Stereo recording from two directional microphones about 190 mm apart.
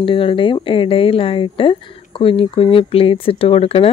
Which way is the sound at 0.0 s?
25° left (ahead or behind).